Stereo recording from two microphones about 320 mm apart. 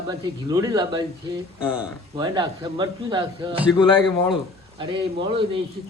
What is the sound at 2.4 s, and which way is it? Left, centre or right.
Speech, centre.